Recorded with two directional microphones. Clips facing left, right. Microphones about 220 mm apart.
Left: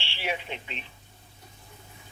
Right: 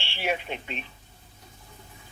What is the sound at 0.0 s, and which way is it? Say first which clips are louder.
Speech: right 4 dB; 50° right (ahead or behind).